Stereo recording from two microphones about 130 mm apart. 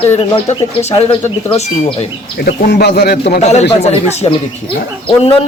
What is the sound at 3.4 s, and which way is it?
Speech, 55° left (ahead or behind).